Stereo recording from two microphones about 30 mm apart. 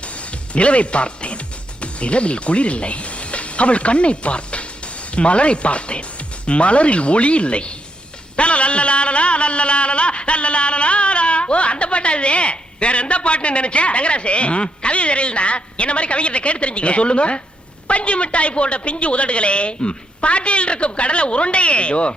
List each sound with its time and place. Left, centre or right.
0.0 s music: left
5.1 s a woman's voice: left
8.4 s a sound: left
17.8 s a woman's voice: left